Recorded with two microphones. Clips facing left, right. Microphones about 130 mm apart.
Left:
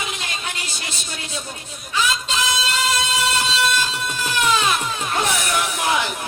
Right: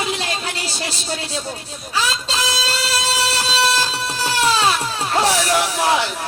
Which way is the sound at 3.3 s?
35° right (ahead or behind).